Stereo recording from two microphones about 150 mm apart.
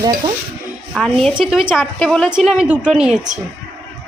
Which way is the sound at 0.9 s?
Centre (ahead or behind).